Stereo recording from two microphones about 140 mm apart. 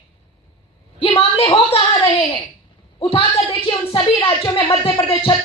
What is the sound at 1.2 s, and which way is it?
A woman's voice, 40° left (ahead or behind).